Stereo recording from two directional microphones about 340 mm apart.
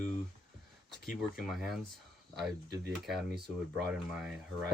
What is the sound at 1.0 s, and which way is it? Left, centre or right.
Speech, centre.